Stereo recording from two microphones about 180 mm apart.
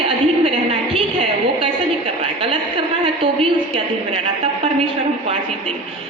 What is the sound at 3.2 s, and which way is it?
Speech, 30° right (ahead or behind).